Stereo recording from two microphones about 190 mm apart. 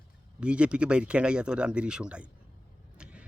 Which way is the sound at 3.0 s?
5° right (ahead or behind).